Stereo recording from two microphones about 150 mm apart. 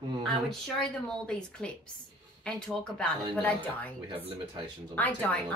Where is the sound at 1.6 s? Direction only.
5° left (ahead or behind).